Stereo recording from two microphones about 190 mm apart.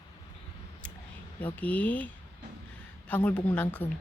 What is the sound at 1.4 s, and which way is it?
Speech, 10° left (ahead or behind).